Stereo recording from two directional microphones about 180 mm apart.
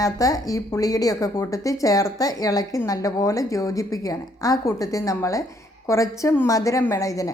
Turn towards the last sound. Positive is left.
turn(degrees=20)  # may be behind; listen again after turning